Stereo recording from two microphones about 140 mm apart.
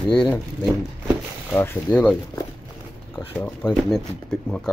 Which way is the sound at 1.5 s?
15° left (ahead or behind).